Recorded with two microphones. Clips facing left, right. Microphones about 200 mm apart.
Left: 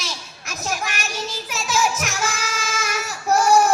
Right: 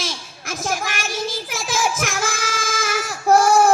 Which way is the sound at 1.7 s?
50° right (ahead or behind).